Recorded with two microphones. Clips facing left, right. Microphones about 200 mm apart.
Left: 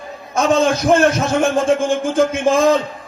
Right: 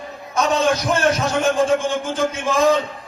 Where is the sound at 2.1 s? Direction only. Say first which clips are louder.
Left 7 dB; 50° left (ahead or behind).